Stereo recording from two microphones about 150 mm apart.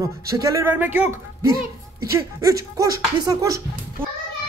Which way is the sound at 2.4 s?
25° right (ahead or behind).